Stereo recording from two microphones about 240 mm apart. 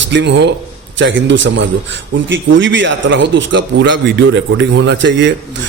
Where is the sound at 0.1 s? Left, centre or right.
Right.